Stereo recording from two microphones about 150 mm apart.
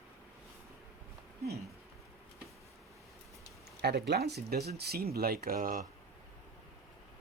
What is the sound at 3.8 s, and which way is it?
Speech, 90° right.